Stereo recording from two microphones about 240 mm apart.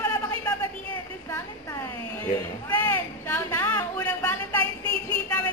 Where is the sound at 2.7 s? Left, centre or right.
Centre.